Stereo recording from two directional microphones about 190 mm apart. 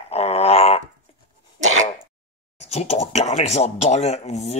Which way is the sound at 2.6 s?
35° left (ahead or behind).